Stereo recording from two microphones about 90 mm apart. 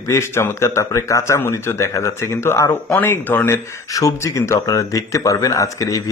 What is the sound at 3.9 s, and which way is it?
Speech, 35° left (ahead or behind).